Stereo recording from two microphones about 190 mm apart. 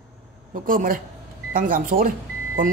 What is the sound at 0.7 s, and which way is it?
Speech, 45° right (ahead or behind).